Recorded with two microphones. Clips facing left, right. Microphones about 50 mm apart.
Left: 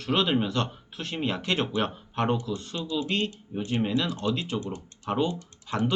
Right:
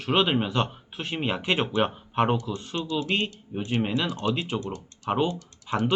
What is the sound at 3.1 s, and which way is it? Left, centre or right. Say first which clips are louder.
Speech: right 1 dB; centre.